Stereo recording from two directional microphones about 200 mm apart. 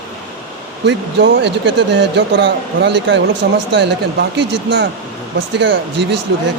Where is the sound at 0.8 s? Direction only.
60° right (ahead or behind).